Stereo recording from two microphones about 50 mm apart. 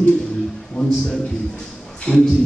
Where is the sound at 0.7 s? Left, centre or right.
Centre.